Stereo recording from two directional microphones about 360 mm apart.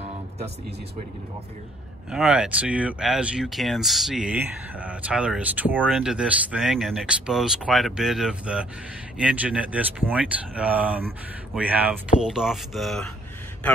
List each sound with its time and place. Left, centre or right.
2.0 s speech: centre